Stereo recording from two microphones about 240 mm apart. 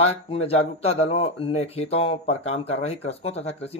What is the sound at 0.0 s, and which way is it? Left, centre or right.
Speech, left.